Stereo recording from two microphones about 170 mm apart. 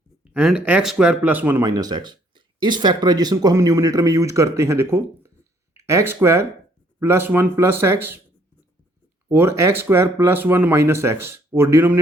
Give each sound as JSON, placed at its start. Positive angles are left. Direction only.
{"t": 0.3, "sound": "speech", "side_deg": -5}
{"t": 9.3, "sound": "speech", "side_deg": -15}